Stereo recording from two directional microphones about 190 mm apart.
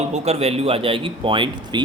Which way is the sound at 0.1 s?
35° right (ahead or behind).